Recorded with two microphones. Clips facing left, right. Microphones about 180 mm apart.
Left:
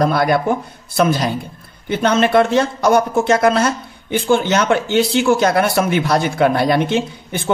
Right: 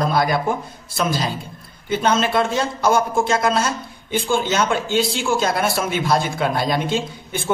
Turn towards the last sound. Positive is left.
turn(degrees=65)  # may be behind; listen again after turning